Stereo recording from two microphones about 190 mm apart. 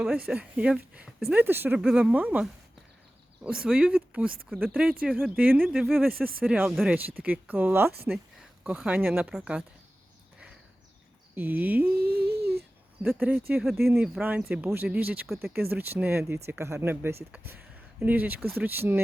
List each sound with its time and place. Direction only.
0.3 s speech: 5° right (ahead or behind)
11.3 s speech: 10° right (ahead or behind)
12.1 s a sound: 55° right (ahead or behind)
13.0 s speech: 5° right (ahead or behind)